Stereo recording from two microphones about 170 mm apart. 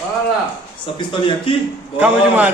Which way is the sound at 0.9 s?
30° left (ahead or behind).